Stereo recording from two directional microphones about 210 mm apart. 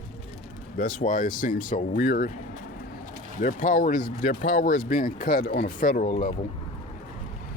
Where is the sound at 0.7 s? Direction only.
40° left (ahead or behind).